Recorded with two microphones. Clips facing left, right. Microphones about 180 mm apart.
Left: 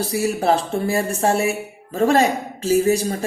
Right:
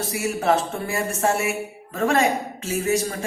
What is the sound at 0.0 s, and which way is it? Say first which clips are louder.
A woman's voice: left 4 dB; 35° left (ahead or behind).